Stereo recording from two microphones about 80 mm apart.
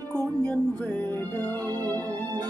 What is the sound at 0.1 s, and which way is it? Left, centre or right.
Music, centre.